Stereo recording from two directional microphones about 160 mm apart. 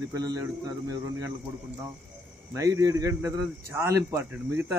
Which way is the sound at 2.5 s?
20° right (ahead or behind).